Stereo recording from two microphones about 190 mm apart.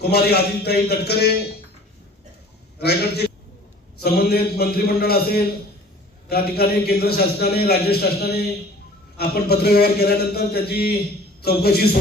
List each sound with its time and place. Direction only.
0.0 s a man's voice: 55° left (ahead or behind)
2.8 s a man's voice: 60° left (ahead or behind)